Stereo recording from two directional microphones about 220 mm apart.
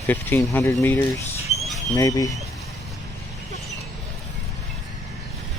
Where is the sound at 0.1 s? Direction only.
10° left (ahead or behind).